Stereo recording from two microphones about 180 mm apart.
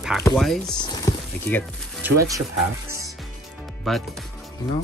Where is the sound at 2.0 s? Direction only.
20° right (ahead or behind).